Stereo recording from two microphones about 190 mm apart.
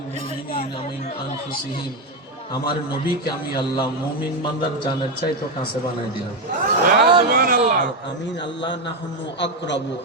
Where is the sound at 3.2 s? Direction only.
25° left (ahead or behind).